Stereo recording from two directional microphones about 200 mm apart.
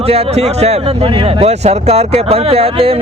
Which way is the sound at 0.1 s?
30° right (ahead or behind).